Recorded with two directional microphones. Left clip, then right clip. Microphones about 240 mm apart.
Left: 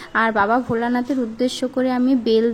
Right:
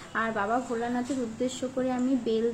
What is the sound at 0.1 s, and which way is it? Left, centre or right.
A woman's voice, left.